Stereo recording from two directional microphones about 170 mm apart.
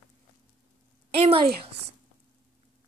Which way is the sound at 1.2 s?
35° right (ahead or behind).